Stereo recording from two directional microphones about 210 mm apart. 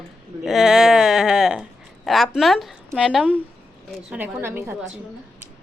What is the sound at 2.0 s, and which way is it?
A woman's voice, centre (ahead or behind).